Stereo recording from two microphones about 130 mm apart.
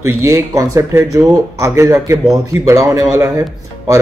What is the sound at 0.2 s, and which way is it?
Speech, 25° right (ahead or behind).